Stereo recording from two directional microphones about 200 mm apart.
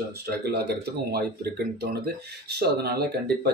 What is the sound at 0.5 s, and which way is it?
Speech, 55° right (ahead or behind).